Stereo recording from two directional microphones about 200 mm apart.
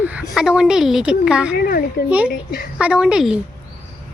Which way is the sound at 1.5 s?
50° left (ahead or behind).